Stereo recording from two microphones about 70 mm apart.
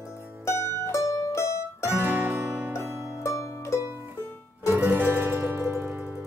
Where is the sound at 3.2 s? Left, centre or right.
Left.